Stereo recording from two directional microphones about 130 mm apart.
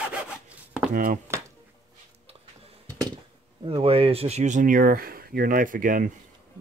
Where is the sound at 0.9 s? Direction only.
90° right.